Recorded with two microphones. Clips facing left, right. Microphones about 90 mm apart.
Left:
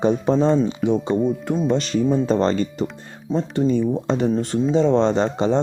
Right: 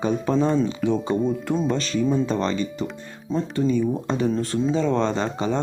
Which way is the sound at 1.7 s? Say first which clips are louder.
Left 5 dB; 25° left (ahead or behind).